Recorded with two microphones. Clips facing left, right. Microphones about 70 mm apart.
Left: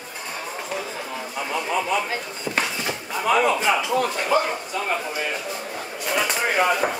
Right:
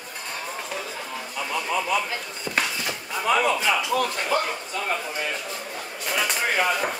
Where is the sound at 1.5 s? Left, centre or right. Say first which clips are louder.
Left 1 dB; centre.